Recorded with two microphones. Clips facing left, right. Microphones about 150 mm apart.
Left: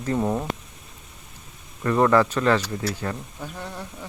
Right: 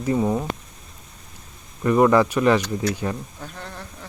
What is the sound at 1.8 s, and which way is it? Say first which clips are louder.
Speech: right 2 dB; 15° right (ahead or behind).